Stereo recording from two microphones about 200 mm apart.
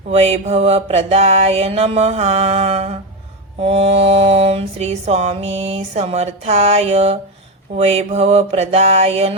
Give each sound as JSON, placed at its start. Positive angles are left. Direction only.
{"t": 0.1, "sound": "mantra", "side_deg": -30}